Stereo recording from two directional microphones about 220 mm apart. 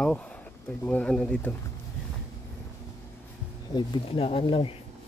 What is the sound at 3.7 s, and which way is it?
Speech, 20° left (ahead or behind).